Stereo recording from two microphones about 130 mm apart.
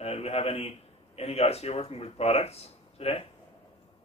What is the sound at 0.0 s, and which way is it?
A man's voice, 50° left (ahead or behind).